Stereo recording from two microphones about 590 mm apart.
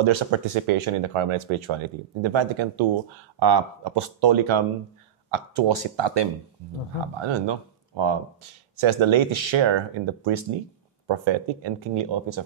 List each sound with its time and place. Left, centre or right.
0.0 s speech: right